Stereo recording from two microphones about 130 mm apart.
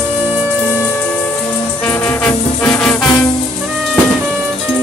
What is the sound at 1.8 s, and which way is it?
Music, 15° left (ahead or behind).